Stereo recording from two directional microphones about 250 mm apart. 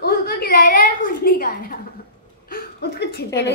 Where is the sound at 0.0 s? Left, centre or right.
Left.